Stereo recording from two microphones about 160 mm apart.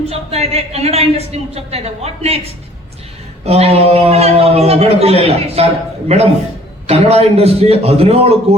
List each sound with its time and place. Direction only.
0.1 s a woman's voice: 40° right (ahead or behind)
3.4 s a woman's voice: 40° right (ahead or behind)